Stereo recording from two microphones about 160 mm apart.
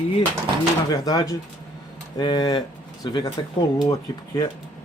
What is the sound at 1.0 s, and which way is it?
Speech, 25° left (ahead or behind).